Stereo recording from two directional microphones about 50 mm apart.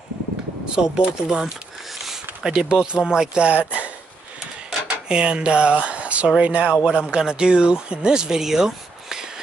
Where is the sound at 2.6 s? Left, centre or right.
Right.